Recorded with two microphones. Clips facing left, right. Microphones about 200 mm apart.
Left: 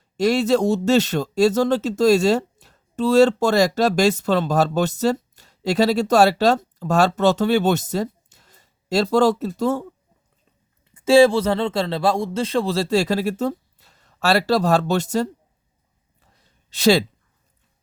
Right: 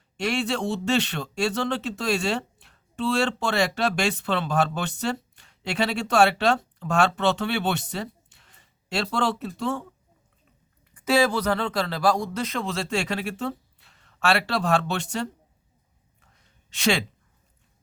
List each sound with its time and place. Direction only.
0.2 s speech: 40° left (ahead or behind)
10.9 s speech: 25° left (ahead or behind)
16.2 s a sound: 35° left (ahead or behind)